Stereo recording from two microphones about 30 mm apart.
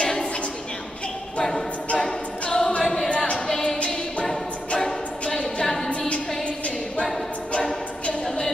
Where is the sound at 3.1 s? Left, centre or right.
Left.